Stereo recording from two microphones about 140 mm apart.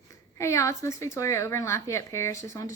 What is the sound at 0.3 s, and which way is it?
A woman's voice, 20° left (ahead or behind).